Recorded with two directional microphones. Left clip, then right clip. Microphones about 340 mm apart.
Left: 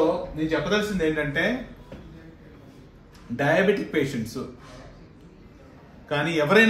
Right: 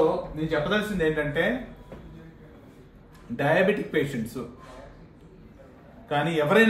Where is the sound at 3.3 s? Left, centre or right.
Centre.